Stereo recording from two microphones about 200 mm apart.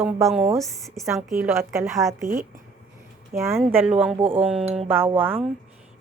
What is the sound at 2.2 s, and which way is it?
Speech, 45° right (ahead or behind).